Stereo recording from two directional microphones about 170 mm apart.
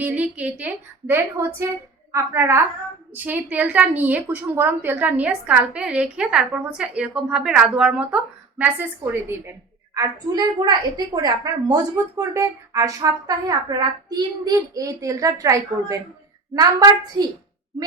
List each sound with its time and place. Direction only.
0.0 s a woman's voice: 10° right (ahead or behind)